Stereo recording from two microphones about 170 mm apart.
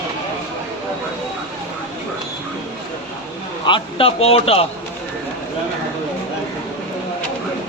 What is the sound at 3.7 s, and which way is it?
Speech, 30° left (ahead or behind).